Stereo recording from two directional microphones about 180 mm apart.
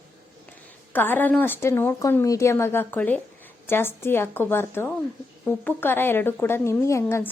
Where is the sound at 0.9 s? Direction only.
10° left (ahead or behind).